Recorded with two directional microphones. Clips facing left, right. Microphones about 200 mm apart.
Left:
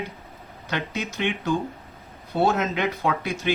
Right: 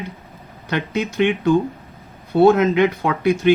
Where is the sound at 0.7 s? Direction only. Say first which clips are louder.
Right 7 dB; 55° right (ahead or behind).